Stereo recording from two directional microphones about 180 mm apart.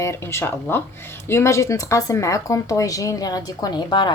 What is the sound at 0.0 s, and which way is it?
Speech, 15° left (ahead or behind).